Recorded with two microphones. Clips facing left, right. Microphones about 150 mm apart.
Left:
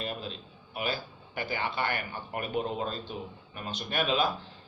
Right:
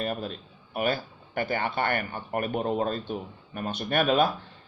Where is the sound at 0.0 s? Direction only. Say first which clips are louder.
Right 6 dB; 55° right (ahead or behind).